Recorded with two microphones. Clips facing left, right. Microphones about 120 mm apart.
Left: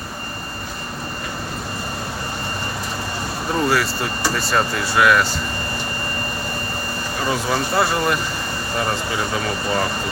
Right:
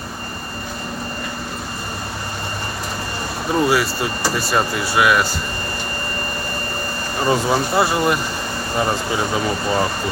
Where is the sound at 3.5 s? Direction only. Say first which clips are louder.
Right 2 dB; 10° right (ahead or behind).